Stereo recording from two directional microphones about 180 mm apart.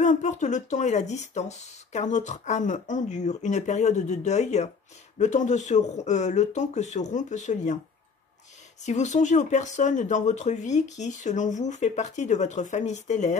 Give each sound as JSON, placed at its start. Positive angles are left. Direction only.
{"t": 0.0, "sound": "speech", "side_deg": 40}
{"t": 8.8, "sound": "speech", "side_deg": 40}